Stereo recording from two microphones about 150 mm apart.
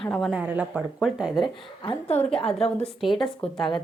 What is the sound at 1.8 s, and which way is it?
Speech, 35° left (ahead or behind).